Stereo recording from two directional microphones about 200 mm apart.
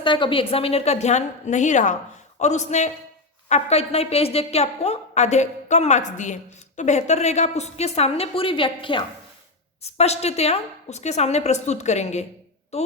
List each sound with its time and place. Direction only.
0.0 s a woman's voice: 25° left (ahead or behind)